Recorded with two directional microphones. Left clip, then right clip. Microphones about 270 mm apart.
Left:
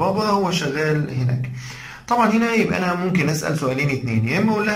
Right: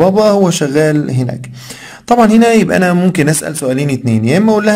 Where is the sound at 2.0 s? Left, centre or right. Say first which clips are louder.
Right 10 dB; right.